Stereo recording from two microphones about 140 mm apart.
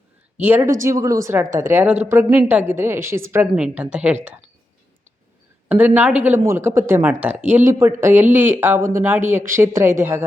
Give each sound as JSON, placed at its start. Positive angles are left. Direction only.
{"t": 0.4, "sound": "a woman's voice", "side_deg": -15}
{"t": 5.6, "sound": "speech", "side_deg": -10}